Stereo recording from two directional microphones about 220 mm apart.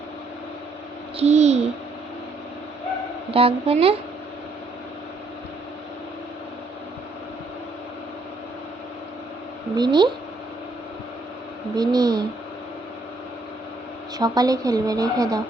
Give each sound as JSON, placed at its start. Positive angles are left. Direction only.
{"t": 1.1, "sound": "a woman's voice", "side_deg": -30}
{"t": 3.3, "sound": "a woman's voice", "side_deg": -25}
{"t": 9.7, "sound": "a woman's voice", "side_deg": -20}
{"t": 11.8, "sound": "speech", "side_deg": -15}
{"t": 14.2, "sound": "speech", "side_deg": -15}